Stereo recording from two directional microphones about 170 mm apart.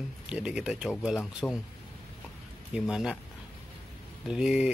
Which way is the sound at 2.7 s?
5° right (ahead or behind).